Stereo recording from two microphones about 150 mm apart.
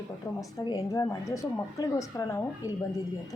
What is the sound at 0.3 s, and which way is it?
Speech, 20° left (ahead or behind).